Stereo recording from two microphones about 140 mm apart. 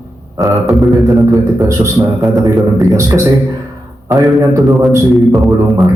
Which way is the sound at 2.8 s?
25° right (ahead or behind).